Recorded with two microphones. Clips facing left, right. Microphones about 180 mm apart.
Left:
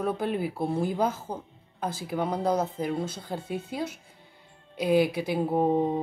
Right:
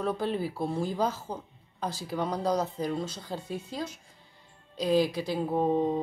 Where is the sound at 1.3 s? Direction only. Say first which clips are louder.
Left 2 dB; 10° left (ahead or behind).